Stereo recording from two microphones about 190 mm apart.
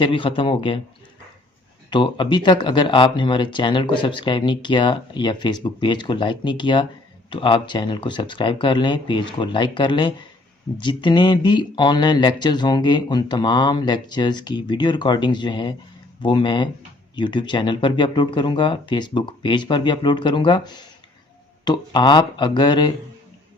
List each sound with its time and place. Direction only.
0.0 s speech: 25° left (ahead or behind)
1.9 s speech: 25° left (ahead or behind)